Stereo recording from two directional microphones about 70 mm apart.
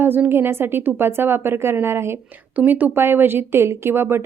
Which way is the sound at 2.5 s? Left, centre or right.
Right.